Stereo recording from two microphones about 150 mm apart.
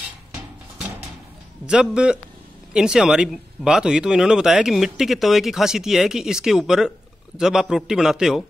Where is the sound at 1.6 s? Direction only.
5° right (ahead or behind).